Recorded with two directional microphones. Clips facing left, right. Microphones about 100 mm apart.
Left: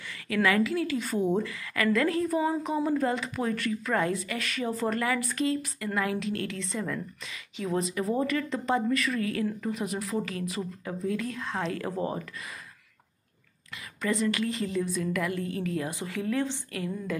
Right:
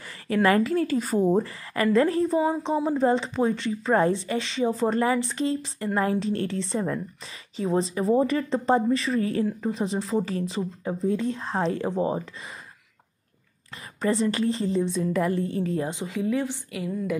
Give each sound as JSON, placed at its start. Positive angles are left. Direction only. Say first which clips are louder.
{"t": 0.3, "sound": "a woman's voice", "louder": "right 4 dB", "side_deg": -40}
{"t": 14.0, "sound": "a woman's voice", "louder": "right 4 dB", "side_deg": -30}
{"t": 16.0, "sound": "a woman's voice", "louder": "right 3 dB", "side_deg": -20}